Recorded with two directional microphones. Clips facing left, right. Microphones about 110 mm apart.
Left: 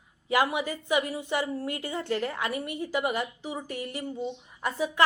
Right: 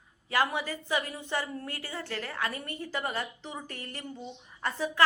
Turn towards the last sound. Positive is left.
turn(degrees=10)  # may be behind; listen again after turning